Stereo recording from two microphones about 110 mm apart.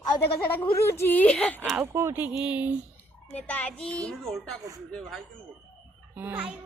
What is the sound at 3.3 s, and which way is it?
A child's voice, 15° left (ahead or behind).